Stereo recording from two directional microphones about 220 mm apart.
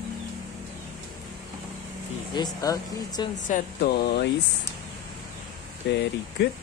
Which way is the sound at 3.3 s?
35° left (ahead or behind).